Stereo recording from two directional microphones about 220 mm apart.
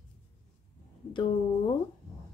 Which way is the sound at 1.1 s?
20° left (ahead or behind).